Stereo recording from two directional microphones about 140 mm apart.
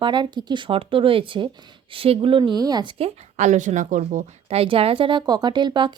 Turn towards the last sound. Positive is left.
turn(degrees=-35)  # may be behind; listen again after turning